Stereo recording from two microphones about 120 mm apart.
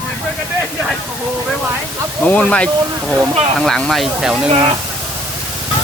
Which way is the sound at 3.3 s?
55° right (ahead or behind).